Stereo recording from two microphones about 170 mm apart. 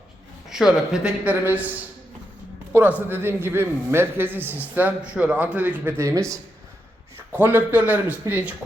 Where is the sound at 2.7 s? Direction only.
10° right (ahead or behind).